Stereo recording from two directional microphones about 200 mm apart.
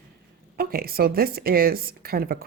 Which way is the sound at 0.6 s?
45° right (ahead or behind).